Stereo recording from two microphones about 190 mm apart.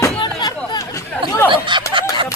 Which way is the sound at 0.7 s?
15° left (ahead or behind).